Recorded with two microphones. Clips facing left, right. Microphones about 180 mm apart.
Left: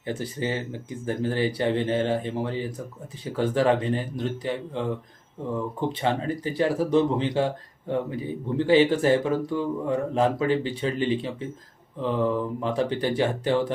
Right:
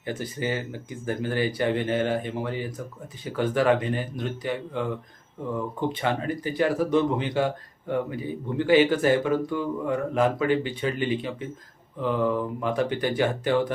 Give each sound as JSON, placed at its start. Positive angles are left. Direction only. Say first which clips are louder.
{"t": 0.0, "sound": "speech", "louder": "left 1 dB", "side_deg": 30}
{"t": 6.0, "sound": "speech", "louder": "left 1 dB", "side_deg": 30}